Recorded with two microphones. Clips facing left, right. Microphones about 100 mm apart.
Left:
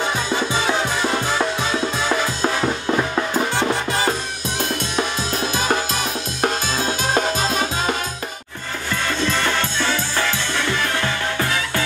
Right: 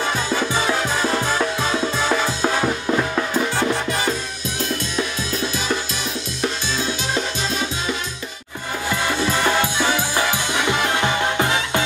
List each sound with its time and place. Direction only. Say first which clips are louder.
2.9 s music: left 1 dB; 10° left (ahead or behind)
6.4 s music: left 3 dB; 50° left (ahead or behind)
9.0 s music: right 1 dB; 10° right (ahead or behind)